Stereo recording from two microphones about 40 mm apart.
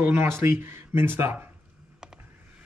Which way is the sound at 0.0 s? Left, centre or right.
Right.